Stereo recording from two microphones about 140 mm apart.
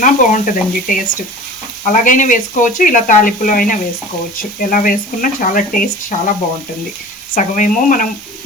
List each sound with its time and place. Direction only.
0.0 s speech: 65° left (ahead or behind)
4.6 s speech: 85° left; by 6.1 s 70° left (ahead or behind)
7.3 s speech: 65° left (ahead or behind)